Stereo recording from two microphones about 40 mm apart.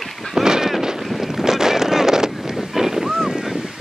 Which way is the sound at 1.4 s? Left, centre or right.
Centre.